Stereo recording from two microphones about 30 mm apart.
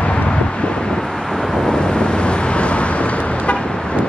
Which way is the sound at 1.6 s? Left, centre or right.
Left.